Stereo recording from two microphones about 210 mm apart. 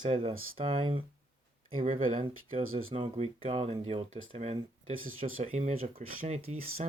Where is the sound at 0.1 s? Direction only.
25° right (ahead or behind).